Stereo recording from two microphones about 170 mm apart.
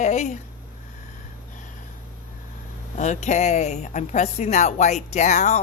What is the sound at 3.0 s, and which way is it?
Speech, 45° left (ahead or behind).